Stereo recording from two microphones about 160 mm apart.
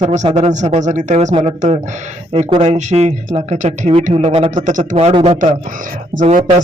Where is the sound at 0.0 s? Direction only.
45° right (ahead or behind).